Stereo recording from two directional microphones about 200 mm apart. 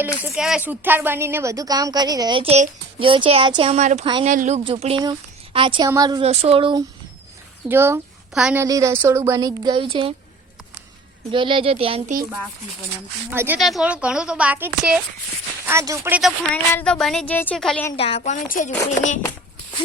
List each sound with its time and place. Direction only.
0.3 s a woman's voice: 5° right (ahead or behind); by 4.0 s 35° right (ahead or behind)
4.0 s a woman's voice: 25° right (ahead or behind)
4.3 s a woman's voice: 35° right (ahead or behind); by 6.2 s 20° right (ahead or behind)
6.2 s a woman's voice: 30° right (ahead or behind)
7.7 s speech: 10° right (ahead or behind)
8.6 s speech: 15° right (ahead or behind)
11.3 s a woman's voice: 25° right (ahead or behind)
13.3 s speech: 10° right (ahead or behind)
13.6 s a woman's voice: centre (ahead or behind)
16.5 s a woman's voice: 5° left (ahead or behind)
17.9 s a woman's voice: 30° left (ahead or behind)
18.2 s speech: 40° left (ahead or behind)